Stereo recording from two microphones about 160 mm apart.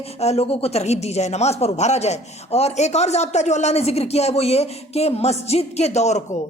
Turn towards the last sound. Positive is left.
turn(degrees=45)  # may be behind; listen again after turning